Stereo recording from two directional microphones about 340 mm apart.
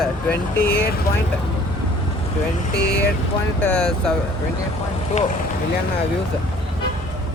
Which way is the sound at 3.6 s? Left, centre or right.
Centre.